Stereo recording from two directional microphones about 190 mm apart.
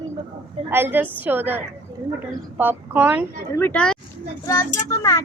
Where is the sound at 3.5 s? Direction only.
10° left (ahead or behind).